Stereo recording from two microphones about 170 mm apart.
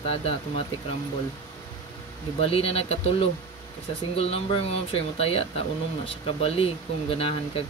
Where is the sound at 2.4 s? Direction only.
35° left (ahead or behind).